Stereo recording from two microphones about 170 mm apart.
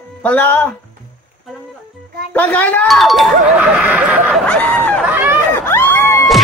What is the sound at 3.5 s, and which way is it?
Snicker, 5° right (ahead or behind).